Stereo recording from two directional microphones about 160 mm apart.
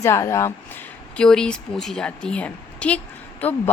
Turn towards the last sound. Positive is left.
turn(degrees=10)  # may be behind; listen again after turning